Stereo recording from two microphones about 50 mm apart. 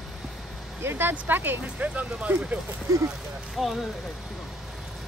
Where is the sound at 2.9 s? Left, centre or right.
Right.